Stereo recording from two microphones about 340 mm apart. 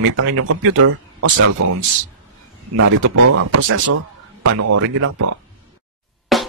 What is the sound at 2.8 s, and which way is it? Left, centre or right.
Speech, right.